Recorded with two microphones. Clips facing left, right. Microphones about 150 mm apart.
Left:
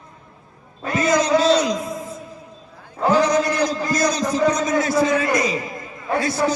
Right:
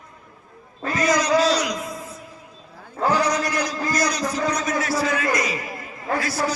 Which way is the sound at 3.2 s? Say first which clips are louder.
Left 5 dB; 30° left (ahead or behind).